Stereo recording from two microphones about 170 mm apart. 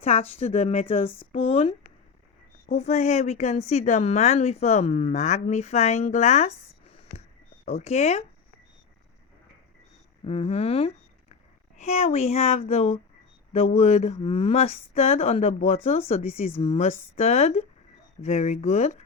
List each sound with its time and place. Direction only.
0.0 s a woman's voice: 35° left (ahead or behind)
7.6 s a woman's voice: 40° left (ahead or behind)
10.2 s a woman's voice: 35° left (ahead or behind)